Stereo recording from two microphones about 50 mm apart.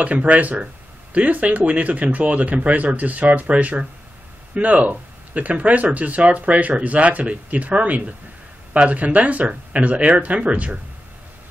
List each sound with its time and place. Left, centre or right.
0.0 s speech: right